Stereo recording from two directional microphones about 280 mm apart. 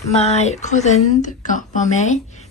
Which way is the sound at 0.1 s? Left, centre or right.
Left.